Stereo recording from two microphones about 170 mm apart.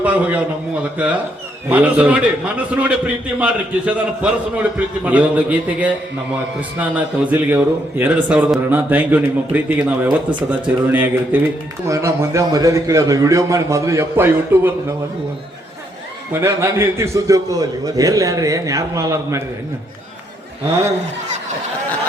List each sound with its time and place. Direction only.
0.0 s a man's voice: 10° right (ahead or behind)
16.3 s a man's voice: 15° right (ahead or behind)